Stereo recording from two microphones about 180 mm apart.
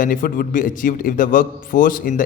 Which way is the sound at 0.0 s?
50° left (ahead or behind).